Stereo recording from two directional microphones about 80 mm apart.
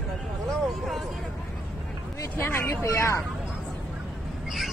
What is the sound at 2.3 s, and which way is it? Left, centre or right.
Speech, left.